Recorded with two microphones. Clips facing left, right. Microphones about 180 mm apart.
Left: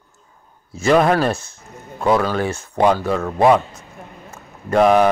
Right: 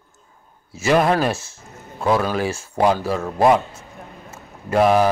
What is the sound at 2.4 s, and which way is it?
Speech, 30° right (ahead or behind).